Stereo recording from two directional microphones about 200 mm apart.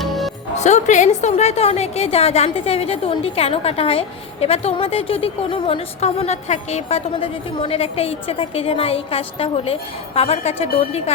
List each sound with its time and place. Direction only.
0.0 s music: centre (ahead or behind)
0.5 s a woman's voice: 35° left (ahead or behind)